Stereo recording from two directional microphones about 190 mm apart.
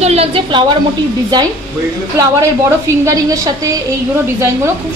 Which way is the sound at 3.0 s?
15° right (ahead or behind).